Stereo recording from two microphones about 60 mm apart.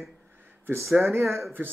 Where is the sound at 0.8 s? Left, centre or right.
Centre.